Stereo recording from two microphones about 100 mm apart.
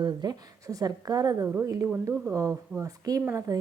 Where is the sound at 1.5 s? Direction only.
20° right (ahead or behind).